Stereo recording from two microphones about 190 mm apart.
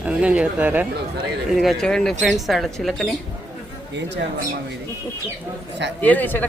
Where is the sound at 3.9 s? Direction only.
65° right (ahead or behind).